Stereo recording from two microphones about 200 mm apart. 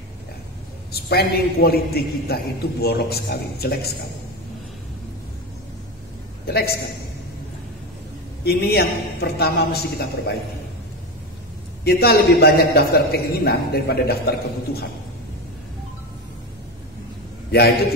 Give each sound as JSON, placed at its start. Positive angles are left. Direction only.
{"t": 0.9, "sound": "a man's voice", "side_deg": 50}
{"t": 6.4, "sound": "a man's voice", "side_deg": 50}
{"t": 8.5, "sound": "a man's voice", "side_deg": 50}
{"t": 11.8, "sound": "a man's voice", "side_deg": 55}